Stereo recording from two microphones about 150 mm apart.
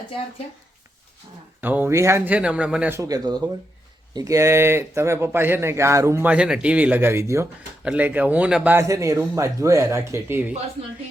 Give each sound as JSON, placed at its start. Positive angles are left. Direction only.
{"t": 1.6, "sound": "speech", "side_deg": -10}
{"t": 3.0, "sound": "speech", "side_deg": -25}